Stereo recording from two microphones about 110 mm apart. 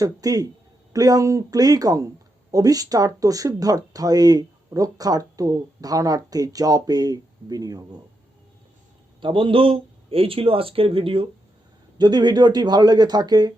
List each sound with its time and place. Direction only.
0.0 s speech: 35° right (ahead or behind)
9.2 s speech: 50° right (ahead or behind)
11.9 s speech: 40° right (ahead or behind)